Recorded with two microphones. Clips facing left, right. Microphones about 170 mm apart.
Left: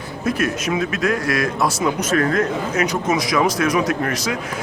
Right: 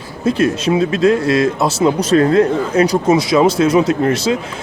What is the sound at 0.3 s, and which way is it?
A man's voice, 30° right (ahead or behind).